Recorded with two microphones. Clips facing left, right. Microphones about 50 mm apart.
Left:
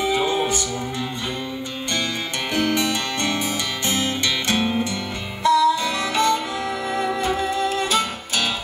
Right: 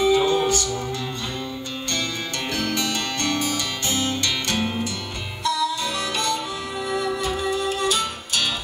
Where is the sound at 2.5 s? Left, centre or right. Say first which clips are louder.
Left 5 dB; left.